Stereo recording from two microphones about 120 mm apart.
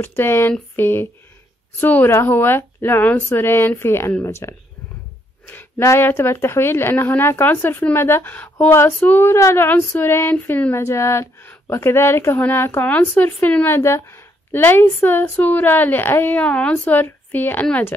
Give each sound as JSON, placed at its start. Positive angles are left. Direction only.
{"t": 0.0, "sound": "speech", "side_deg": 20}